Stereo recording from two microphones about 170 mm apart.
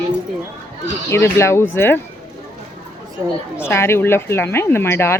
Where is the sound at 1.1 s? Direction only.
15° left (ahead or behind).